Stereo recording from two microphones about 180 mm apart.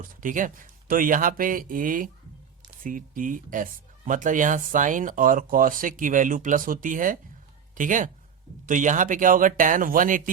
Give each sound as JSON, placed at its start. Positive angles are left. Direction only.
{"t": 0.0, "sound": "speech", "side_deg": -45}